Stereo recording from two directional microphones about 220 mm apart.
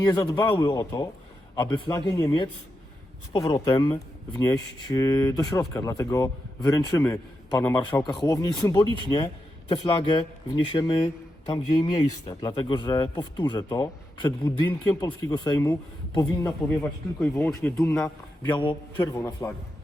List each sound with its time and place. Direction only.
0.0 s speech: 20° left (ahead or behind)
17.2 s speech: 5° left (ahead or behind)
18.5 s speech: 25° left (ahead or behind)
18.9 s speech: 10° left (ahead or behind)